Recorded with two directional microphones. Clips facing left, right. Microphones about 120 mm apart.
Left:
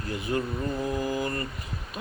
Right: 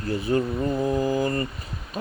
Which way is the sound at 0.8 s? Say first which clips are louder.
Right 6 dB; 30° right (ahead or behind).